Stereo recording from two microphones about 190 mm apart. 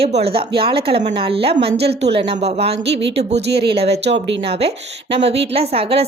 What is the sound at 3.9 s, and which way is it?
Speech, 65° right (ahead or behind).